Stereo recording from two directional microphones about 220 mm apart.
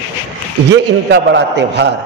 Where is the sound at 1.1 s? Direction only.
50° right (ahead or behind).